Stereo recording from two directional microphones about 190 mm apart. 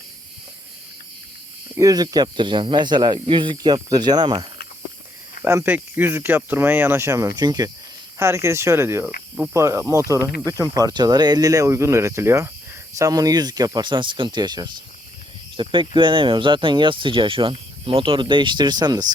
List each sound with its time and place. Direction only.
1.7 s speech: 20° right (ahead or behind)
5.5 s speech: 10° right (ahead or behind)